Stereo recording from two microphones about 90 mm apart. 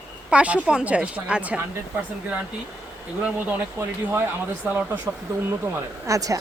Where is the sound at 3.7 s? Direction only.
25° right (ahead or behind).